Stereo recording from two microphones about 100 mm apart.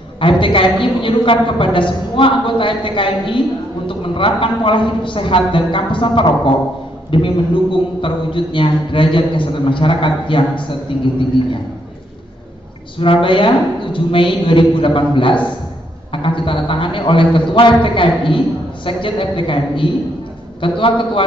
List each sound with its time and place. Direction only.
0.2 s a woman's voice: 55° left (ahead or behind)
13.0 s a woman's voice: 60° left (ahead or behind)